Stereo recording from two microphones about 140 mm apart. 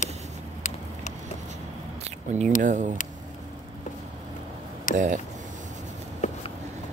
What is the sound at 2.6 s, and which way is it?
Speech, 60° right (ahead or behind).